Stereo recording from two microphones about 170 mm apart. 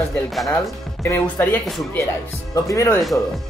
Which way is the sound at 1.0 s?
15° left (ahead or behind).